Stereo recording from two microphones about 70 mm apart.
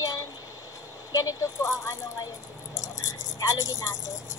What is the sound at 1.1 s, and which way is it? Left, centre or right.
Speech, left.